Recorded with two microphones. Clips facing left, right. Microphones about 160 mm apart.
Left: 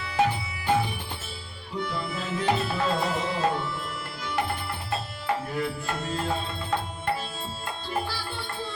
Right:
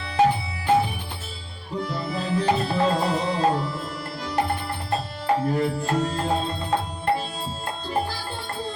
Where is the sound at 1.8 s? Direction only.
35° right (ahead or behind).